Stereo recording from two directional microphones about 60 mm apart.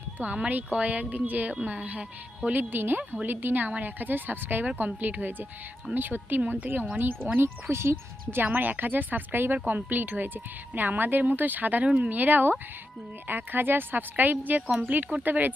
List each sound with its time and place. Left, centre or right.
0.2 s speech: right
7.3 s speech: right